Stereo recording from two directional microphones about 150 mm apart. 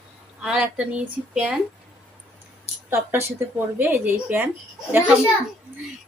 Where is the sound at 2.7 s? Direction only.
45° left (ahead or behind).